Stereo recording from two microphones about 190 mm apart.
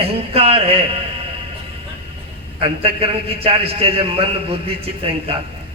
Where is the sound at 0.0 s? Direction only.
30° right (ahead or behind).